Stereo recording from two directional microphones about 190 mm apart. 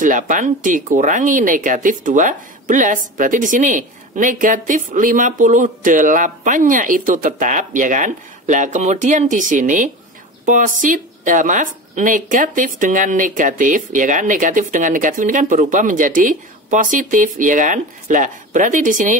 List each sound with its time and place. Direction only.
0.0 s speech: 45° right (ahead or behind)